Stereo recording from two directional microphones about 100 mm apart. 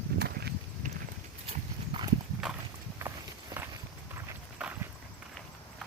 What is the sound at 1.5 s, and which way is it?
Clip-clop, 60° right (ahead or behind).